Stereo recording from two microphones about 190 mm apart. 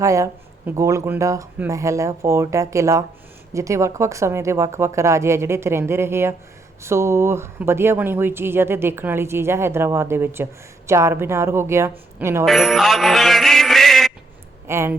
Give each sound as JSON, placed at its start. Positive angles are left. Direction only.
{"t": 0.0, "sound": "speech", "side_deg": -15}
{"t": 12.5, "sound": "music", "side_deg": 0}
{"t": 14.7, "sound": "speech", "side_deg": -15}